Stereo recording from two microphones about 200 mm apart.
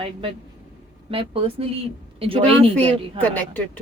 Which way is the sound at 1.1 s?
25° right (ahead or behind).